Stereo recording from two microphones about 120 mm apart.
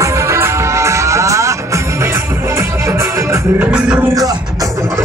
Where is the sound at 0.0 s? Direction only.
25° right (ahead or behind).